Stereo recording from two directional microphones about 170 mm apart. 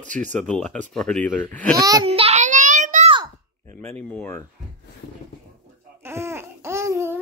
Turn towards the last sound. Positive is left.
turn(degrees=-15)  # may be behind; listen again after turning